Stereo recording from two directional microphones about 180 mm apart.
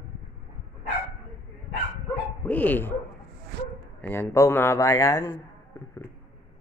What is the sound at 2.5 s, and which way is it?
Bow-wow, 10° left (ahead or behind).